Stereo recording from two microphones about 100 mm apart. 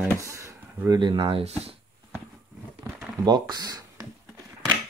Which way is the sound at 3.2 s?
45° right (ahead or behind).